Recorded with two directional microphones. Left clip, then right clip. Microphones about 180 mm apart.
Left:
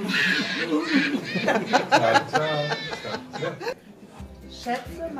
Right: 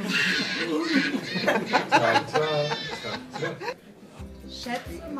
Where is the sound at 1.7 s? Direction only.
55° left (ahead or behind).